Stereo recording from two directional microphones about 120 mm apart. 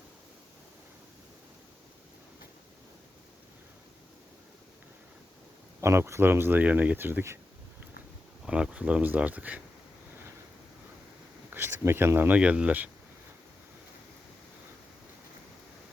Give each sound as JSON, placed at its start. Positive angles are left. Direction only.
{"t": 5.8, "sound": "speech", "side_deg": -25}
{"t": 8.4, "sound": "speech", "side_deg": -5}
{"t": 11.5, "sound": "speech", "side_deg": -20}